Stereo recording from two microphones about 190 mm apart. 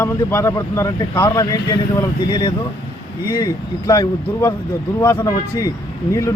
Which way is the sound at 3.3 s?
15° left (ahead or behind).